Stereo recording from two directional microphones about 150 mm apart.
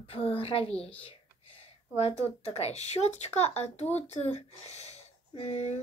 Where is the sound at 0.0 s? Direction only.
40° left (ahead or behind).